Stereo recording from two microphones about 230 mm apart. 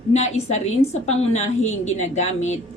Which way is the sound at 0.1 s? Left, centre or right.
Left.